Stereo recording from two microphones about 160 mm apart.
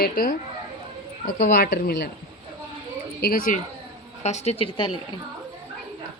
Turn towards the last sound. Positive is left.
turn(degrees=35)  # may be behind; listen again after turning